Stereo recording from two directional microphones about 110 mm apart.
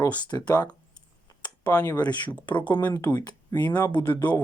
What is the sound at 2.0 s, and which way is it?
Speech, 40° left (ahead or behind).